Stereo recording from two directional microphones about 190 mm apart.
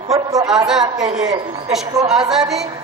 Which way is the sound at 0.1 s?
20° right (ahead or behind).